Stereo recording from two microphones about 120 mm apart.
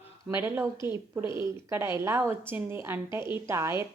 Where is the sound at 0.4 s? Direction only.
20° right (ahead or behind).